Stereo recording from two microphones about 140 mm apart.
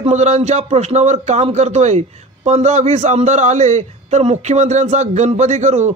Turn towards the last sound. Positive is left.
turn(degrees=-55)  # may be behind; listen again after turning